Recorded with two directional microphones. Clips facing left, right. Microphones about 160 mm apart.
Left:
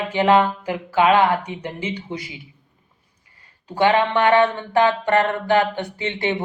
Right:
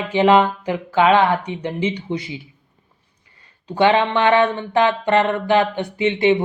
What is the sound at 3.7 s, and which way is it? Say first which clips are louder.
Speech: right 1 dB; 25° right (ahead or behind).